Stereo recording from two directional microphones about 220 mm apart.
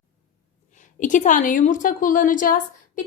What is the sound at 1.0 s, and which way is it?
A woman's voice, 35° left (ahead or behind).